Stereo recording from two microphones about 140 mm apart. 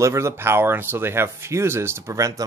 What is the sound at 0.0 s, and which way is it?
Speech, 20° right (ahead or behind).